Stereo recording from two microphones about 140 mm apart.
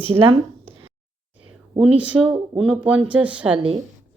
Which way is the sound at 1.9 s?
10° right (ahead or behind).